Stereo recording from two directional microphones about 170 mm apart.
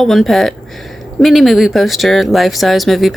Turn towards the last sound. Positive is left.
turn(degrees=0)  # may be behind; listen again after turning